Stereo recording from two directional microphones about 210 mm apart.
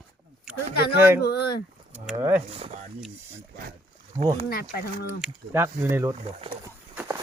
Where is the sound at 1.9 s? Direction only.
10° right (ahead or behind).